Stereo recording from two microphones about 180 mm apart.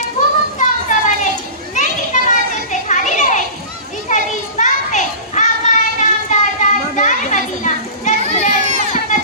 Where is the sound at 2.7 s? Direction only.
45° left (ahead or behind).